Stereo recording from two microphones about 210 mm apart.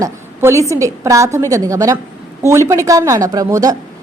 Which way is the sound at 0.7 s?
15° right (ahead or behind).